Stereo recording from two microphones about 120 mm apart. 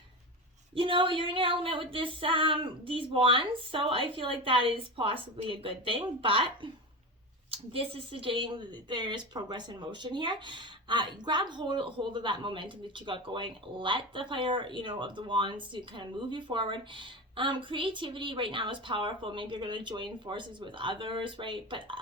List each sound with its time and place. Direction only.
0.8 s speech: 45° right (ahead or behind)